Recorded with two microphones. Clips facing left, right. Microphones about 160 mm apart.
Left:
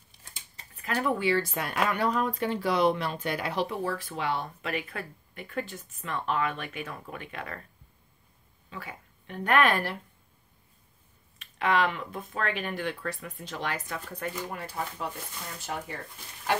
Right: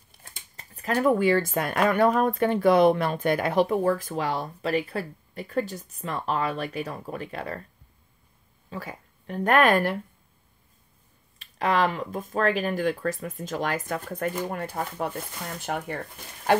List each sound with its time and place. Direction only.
0.1 s speech: 50° right (ahead or behind); by 7.6 s 35° right (ahead or behind)
8.6 s speech: 40° right (ahead or behind)
11.3 s speech: 40° right (ahead or behind)
15.6 s speech: 60° right (ahead or behind)